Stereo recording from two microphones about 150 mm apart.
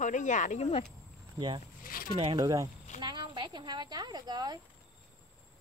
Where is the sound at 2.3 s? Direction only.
25° right (ahead or behind).